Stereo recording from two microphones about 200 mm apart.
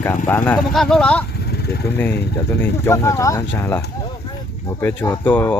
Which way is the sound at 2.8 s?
15° left (ahead or behind).